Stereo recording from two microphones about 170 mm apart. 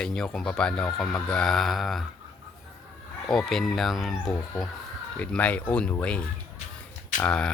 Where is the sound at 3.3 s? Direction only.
Centre (ahead or behind).